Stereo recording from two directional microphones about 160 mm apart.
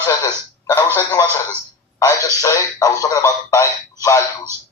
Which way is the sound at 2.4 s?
20° left (ahead or behind).